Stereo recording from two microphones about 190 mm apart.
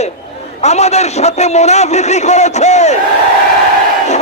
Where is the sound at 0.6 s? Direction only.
35° left (ahead or behind).